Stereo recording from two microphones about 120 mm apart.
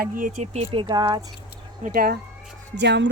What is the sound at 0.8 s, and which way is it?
Speech, 35° right (ahead or behind).